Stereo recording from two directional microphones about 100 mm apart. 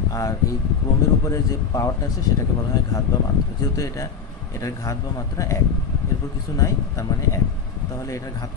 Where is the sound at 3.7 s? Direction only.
30° left (ahead or behind).